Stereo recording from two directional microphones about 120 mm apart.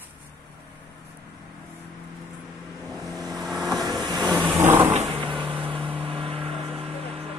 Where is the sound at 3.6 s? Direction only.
30° right (ahead or behind).